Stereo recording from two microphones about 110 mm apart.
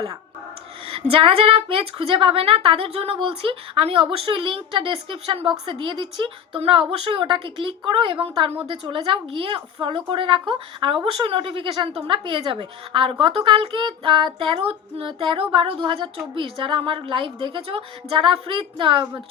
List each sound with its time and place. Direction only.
0.9 s a woman's voice: 55° right (ahead or behind)